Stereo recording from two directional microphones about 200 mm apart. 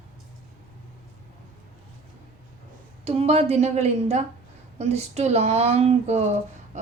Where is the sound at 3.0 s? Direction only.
30° right (ahead or behind).